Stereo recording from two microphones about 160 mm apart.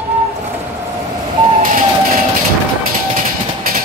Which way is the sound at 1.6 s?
55° right (ahead or behind).